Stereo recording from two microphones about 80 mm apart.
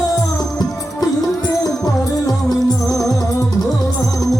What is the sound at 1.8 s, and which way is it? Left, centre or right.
Music, left.